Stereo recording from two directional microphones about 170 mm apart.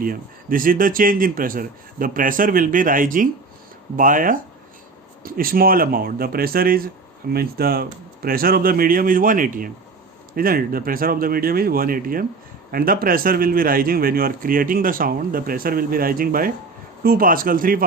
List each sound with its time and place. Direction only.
0.0 s speech: 55° right (ahead or behind)